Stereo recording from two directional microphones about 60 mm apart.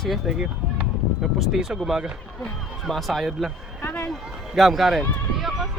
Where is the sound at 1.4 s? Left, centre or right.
Centre.